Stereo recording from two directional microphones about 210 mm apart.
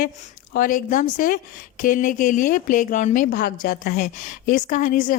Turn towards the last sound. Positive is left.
turn(degrees=40)  # may be behind; listen again after turning